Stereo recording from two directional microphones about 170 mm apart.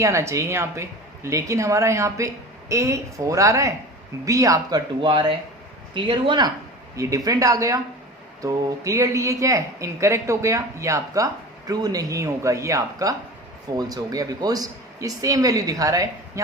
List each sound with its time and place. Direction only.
0.0 s speech: 15° right (ahead or behind)